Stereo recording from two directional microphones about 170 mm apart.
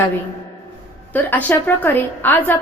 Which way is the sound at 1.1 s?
10° left (ahead or behind).